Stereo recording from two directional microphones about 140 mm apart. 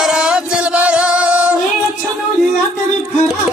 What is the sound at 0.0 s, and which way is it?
Music, 5° right (ahead or behind).